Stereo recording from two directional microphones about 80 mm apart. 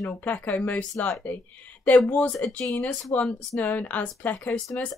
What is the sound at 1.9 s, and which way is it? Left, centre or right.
Speech, centre.